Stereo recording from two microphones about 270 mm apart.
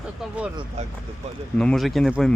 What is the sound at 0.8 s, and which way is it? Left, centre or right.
Speech, right.